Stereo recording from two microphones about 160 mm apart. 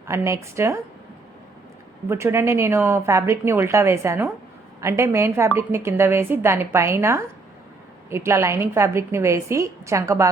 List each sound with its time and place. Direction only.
0.0 s a woman's voice: 15° right (ahead or behind)
2.0 s a woman's voice: 15° right (ahead or behind)